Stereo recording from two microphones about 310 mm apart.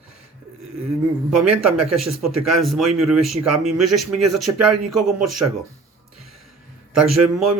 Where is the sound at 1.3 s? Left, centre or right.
Right.